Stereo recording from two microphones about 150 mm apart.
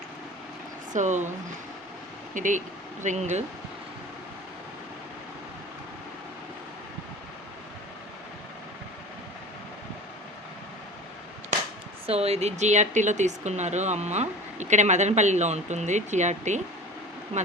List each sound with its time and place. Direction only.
0.9 s speech: 55° right (ahead or behind)
2.3 s speech: 60° right (ahead or behind)
12.0 s speech: 45° right (ahead or behind)